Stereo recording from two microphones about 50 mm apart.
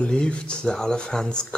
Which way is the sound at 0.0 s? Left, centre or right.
Centre.